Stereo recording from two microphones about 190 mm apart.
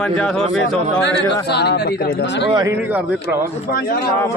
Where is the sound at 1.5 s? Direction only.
60° left (ahead or behind).